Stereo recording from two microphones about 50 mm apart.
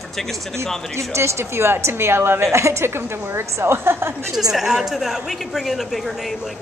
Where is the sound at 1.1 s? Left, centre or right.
Right.